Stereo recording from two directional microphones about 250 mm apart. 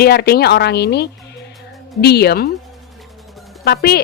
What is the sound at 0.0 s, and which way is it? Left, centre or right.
A woman's voice, left.